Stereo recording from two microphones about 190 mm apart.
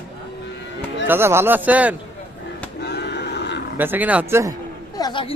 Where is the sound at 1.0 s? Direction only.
10° right (ahead or behind).